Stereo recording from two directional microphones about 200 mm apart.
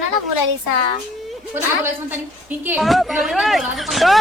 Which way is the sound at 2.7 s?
Centre (ahead or behind).